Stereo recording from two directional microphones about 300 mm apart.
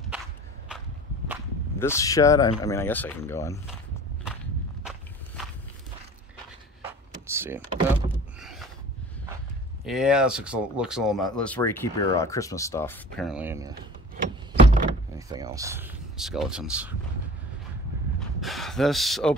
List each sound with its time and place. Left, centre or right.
0.7 s walk: centre
1.8 s speech: centre
7.2 s door: centre
9.8 s speech: centre
14.1 s vehicle: right
15.1 s speech: centre
18.4 s gasp: centre